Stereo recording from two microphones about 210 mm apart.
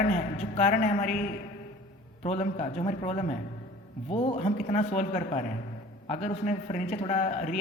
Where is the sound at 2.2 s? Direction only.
30° left (ahead or behind).